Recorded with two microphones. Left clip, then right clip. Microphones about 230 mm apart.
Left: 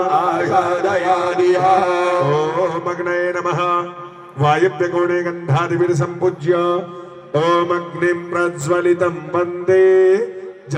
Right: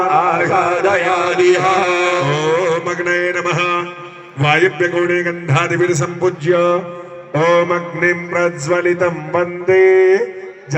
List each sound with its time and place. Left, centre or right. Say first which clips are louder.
0.0 s chant: right 3 dB; left
4.4 s a man's voice: right 2 dB; left